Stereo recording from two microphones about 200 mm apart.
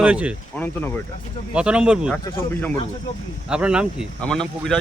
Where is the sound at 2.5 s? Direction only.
10° left (ahead or behind).